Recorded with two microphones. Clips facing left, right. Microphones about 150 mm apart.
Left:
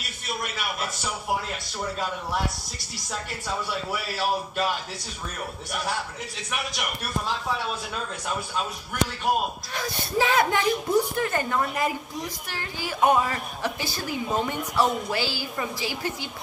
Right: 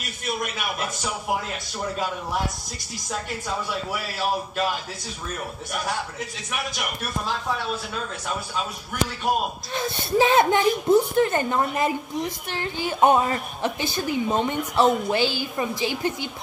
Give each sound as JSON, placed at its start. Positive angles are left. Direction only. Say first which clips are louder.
{"t": 9.8, "sound": "speech", "louder": "right 5 dB", "side_deg": -25}